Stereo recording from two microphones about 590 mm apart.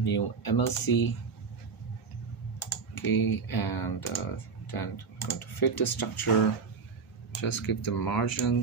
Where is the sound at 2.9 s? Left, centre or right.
Left.